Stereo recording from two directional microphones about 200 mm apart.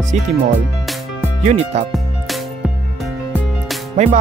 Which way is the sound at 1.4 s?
30° right (ahead or behind).